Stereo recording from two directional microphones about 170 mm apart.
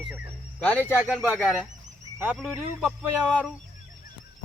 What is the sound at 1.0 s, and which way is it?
A man's voice, 5° right (ahead or behind).